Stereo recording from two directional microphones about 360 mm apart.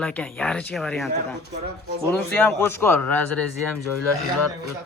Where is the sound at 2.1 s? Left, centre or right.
Centre.